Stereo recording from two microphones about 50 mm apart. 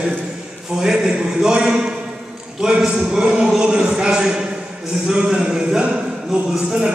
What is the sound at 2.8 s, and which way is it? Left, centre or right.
Speech, centre.